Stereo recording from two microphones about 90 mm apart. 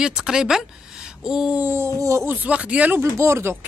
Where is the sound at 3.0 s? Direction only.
30° right (ahead or behind).